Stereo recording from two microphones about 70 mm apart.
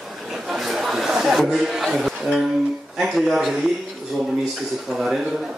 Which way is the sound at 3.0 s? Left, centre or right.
Centre.